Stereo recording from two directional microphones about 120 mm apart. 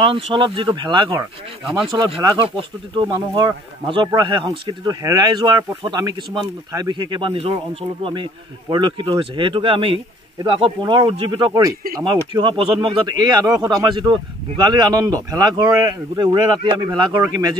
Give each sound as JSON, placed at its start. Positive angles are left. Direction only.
{"t": 0.0, "sound": "speech", "side_deg": -45}
{"t": 2.3, "sound": "speech", "side_deg": -45}